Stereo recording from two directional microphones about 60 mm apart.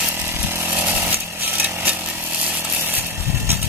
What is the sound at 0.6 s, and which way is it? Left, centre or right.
Chainsaw, right.